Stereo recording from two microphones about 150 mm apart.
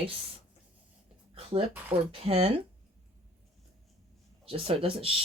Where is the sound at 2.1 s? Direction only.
40° right (ahead or behind).